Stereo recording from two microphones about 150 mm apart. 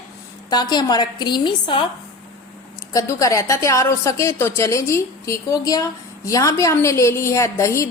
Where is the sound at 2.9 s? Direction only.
20° left (ahead or behind).